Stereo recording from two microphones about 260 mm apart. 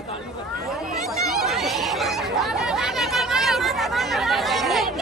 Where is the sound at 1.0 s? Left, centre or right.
Centre.